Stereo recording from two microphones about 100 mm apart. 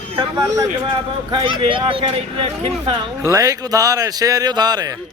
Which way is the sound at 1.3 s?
55° right (ahead or behind).